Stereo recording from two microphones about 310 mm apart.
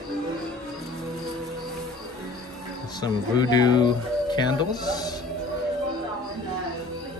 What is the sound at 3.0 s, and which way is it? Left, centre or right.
Speech, centre.